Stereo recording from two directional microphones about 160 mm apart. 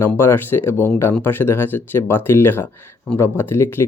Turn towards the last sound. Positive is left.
turn(degrees=15)  # may be behind; listen again after turning